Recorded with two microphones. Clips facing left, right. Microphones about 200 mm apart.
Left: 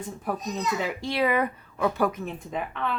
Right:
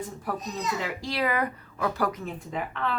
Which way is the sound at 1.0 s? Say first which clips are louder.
Left 3 dB; 25° left (ahead or behind).